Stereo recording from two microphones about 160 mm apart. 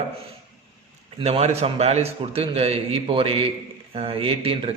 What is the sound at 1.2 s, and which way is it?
A man's voice, 40° right (ahead or behind).